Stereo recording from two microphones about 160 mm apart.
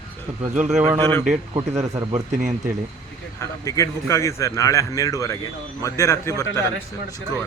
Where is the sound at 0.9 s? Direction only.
25° right (ahead or behind).